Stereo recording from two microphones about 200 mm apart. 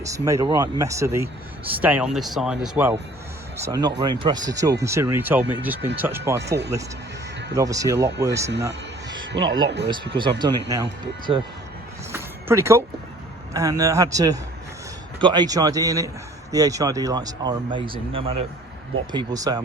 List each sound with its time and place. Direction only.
0.0 s speech: 15° right (ahead or behind)
7.5 s speech: 15° right (ahead or behind)
9.6 s speech: 60° right (ahead or behind)
10.2 s speech: 25° right (ahead or behind)
12.1 s a sound: 15° right (ahead or behind)
13.5 s speech: 15° right (ahead or behind)